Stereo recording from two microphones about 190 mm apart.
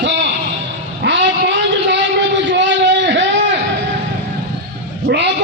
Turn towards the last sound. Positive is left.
turn(degrees=-65)  # may be behind; listen again after turning